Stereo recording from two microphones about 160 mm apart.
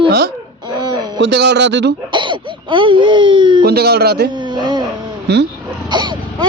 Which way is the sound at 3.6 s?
80° right.